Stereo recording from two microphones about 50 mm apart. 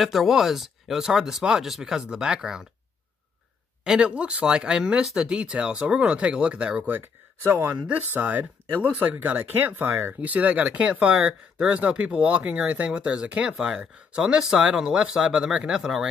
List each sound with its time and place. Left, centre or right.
0.0 s speech: centre
3.8 s speech: centre
6.9 s speech: right
7.7 s speech: right
8.0 s speech: right
10.2 s speech: right; by 16.1 s centre